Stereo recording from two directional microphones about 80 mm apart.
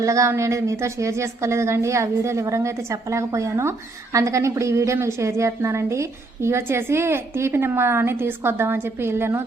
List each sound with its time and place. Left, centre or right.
0.0 s a woman's voice: right